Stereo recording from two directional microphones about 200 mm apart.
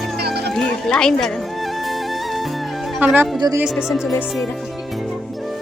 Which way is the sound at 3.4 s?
20° right (ahead or behind).